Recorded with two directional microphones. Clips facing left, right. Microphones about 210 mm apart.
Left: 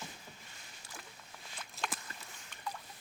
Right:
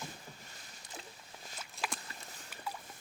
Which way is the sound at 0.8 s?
20° right (ahead or behind).